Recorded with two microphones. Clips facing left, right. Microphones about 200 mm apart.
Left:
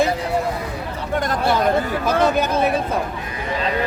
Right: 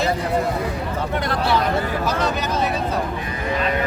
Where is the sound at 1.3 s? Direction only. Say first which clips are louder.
Left 3 dB; 45° left (ahead or behind).